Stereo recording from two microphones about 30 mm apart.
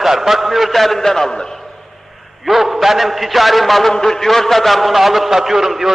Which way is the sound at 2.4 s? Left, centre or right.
Centre.